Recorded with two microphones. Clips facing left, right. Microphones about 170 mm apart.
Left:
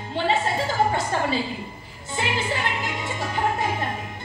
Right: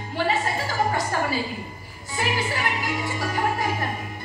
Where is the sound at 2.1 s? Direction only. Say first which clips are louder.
Even; 25° left (ahead or behind).